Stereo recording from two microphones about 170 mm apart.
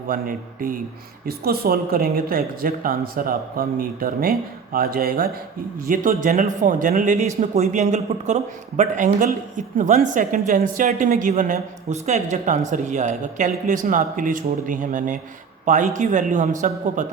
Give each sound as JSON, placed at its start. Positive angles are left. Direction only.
{"t": 0.1, "sound": "a man's voice", "side_deg": -55}